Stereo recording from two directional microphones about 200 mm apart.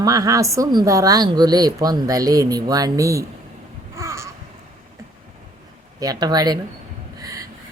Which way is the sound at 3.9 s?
15° right (ahead or behind).